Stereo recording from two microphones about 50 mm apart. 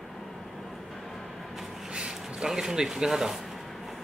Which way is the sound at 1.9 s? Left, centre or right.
Centre.